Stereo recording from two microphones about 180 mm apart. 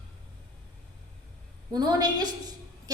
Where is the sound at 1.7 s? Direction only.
20° right (ahead or behind).